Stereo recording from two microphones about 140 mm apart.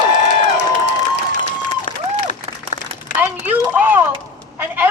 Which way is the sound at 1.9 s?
40° left (ahead or behind).